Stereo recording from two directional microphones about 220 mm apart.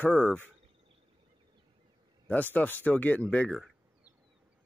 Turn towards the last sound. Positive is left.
turn(degrees=5)  # may be behind; listen again after turning